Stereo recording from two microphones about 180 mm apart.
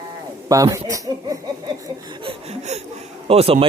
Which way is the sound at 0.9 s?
20° right (ahead or behind).